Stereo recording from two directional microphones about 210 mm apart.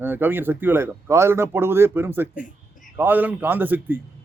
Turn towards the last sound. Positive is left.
turn(degrees=-10)  # may be behind; listen again after turning